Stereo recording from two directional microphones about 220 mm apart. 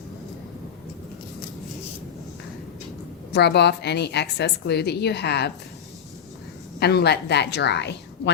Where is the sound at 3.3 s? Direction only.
50° left (ahead or behind).